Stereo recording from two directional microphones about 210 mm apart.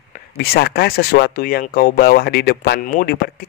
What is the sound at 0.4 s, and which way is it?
Speech, 50° left (ahead or behind).